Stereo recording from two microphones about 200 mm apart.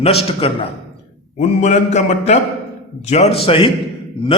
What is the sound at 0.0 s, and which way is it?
A man's voice, 30° left (ahead or behind).